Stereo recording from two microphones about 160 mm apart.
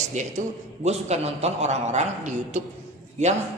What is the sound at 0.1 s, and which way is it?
A man's voice, 50° right (ahead or behind).